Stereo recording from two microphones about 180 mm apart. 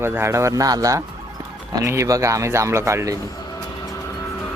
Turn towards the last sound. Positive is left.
turn(degrees=15)  # may be behind; listen again after turning